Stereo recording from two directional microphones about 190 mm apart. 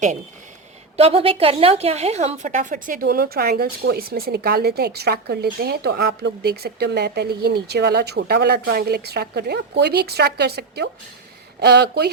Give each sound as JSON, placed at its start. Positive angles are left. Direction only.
{"t": 0.9, "sound": "a woman's voice", "side_deg": -30}